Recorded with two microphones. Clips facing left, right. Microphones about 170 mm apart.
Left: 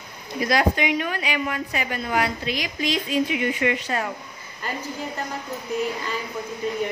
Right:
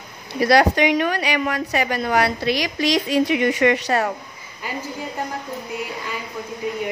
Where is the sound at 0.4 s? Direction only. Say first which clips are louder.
Right 6 dB; 70° right (ahead or behind).